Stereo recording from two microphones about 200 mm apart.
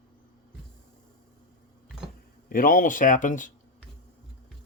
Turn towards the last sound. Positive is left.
turn(degrees=40)  # may be behind; listen again after turning